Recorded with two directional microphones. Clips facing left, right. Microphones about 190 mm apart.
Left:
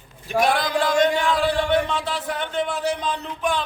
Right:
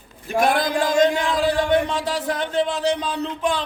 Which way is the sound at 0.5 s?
45° right (ahead or behind).